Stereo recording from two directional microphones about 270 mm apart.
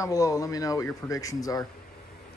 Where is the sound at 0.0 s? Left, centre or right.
Centre.